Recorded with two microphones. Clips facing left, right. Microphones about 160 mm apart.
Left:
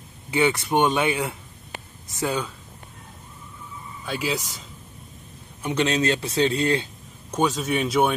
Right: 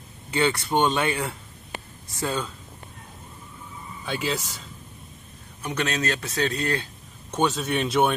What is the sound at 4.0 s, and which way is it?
Speech, 5° left (ahead or behind).